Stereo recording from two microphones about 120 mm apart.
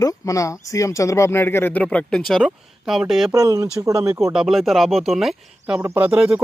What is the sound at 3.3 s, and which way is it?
Speech, 30° right (ahead or behind).